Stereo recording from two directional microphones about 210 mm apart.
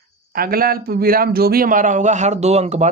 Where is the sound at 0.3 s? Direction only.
45° right (ahead or behind).